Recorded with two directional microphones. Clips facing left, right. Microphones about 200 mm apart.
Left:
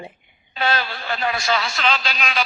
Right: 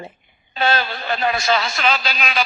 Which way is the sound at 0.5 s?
25° right (ahead or behind).